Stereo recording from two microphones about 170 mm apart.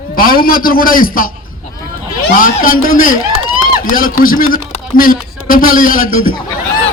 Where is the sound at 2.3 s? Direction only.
55° left (ahead or behind).